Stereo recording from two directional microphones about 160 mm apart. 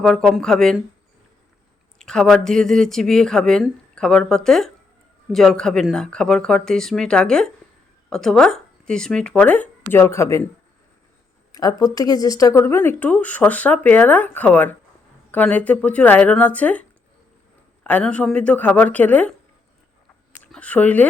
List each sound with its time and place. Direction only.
0.0 s speech: 5° left (ahead or behind)
2.0 s speech: 5° left (ahead or behind)
11.5 s speech: 20° left (ahead or behind)
17.8 s speech: 10° left (ahead or behind)
20.4 s speech: 10° left (ahead or behind)